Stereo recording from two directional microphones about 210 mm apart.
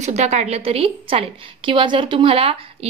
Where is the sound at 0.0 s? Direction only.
30° right (ahead or behind).